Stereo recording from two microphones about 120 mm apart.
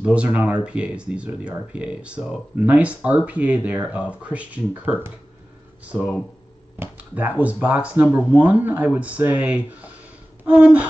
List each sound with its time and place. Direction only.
0.0 s speech: 10° right (ahead or behind)
6.8 s speech: 15° right (ahead or behind)